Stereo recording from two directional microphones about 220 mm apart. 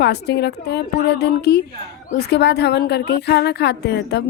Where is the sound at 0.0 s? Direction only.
50° left (ahead or behind).